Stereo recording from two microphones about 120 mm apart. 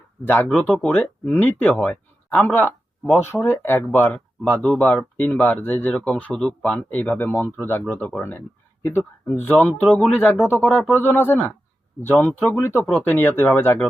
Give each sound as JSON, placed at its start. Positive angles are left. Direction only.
{"t": 0.5, "sound": "speech", "side_deg": 10}
{"t": 9.8, "sound": "speech", "side_deg": 0}
{"t": 10.4, "sound": "speech", "side_deg": 20}